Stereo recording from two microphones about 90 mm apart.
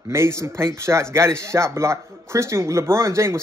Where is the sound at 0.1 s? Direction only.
30° right (ahead or behind).